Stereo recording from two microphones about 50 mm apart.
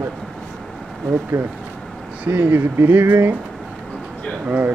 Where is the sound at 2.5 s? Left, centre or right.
Right.